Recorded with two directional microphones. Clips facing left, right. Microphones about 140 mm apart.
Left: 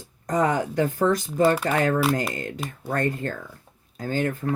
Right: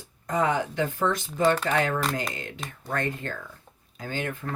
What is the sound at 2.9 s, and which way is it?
Speech, 45° left (ahead or behind).